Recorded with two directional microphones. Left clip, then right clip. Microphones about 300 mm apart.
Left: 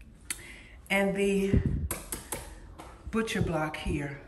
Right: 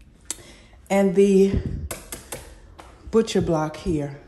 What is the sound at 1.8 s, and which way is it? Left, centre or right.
Tap, centre.